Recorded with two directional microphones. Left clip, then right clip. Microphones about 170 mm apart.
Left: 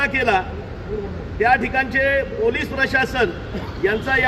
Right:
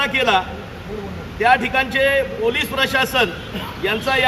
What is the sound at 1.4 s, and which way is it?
A man's voice, 10° left (ahead or behind).